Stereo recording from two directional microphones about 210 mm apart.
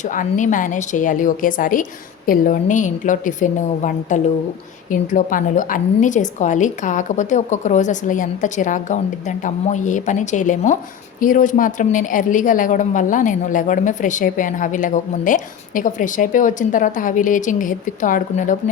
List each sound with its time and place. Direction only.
0.0 s a woman's voice: 35° left (ahead or behind)